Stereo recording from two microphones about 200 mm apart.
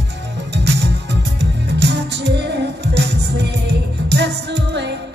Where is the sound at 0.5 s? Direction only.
55° right (ahead or behind).